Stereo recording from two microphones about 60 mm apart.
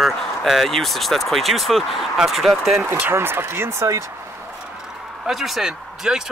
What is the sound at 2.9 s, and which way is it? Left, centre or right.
Speech, right.